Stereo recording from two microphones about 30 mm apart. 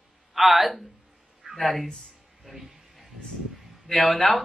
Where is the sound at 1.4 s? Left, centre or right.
Right.